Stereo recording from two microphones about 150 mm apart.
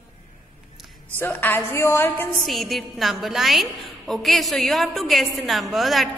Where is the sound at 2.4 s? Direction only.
Centre (ahead or behind).